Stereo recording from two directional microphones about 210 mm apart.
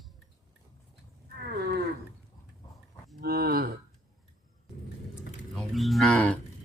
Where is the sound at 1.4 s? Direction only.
50° right (ahead or behind).